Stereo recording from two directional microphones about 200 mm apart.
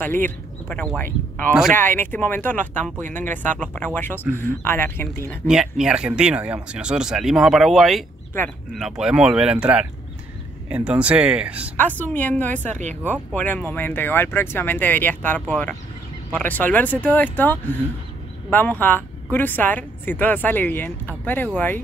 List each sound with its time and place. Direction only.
0.0 s speech: 10° left (ahead or behind)
5.5 s speech: 5° right (ahead or behind)
11.7 s speech: 10° left (ahead or behind)
12.6 s speech: 35° right (ahead or behind)
13.3 s speech: 5° left (ahead or behind)